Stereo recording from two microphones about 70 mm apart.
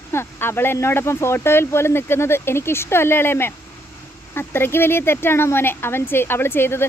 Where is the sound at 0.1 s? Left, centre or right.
Left.